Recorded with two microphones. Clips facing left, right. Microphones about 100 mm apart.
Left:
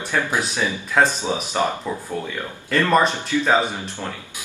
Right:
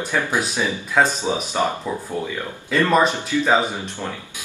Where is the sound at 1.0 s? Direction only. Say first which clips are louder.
Even; 5° right (ahead or behind).